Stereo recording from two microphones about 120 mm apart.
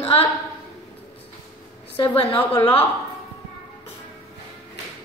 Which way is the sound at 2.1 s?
50° left (ahead or behind).